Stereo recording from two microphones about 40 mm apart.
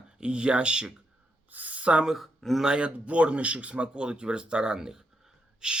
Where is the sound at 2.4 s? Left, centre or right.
Centre.